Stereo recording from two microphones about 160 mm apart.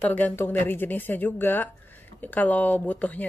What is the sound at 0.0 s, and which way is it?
Speech, 10° left (ahead or behind).